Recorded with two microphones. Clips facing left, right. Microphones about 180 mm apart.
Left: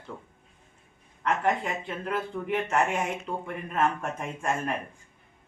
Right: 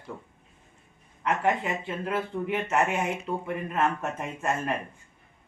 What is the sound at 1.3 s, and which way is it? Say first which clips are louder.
Speech: right 1 dB; 5° right (ahead or behind).